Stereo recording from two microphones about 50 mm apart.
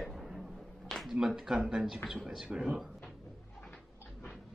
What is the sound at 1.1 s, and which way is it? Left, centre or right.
Speech, centre.